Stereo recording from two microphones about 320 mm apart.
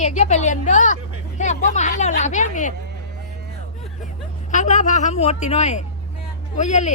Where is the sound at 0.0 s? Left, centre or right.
Left.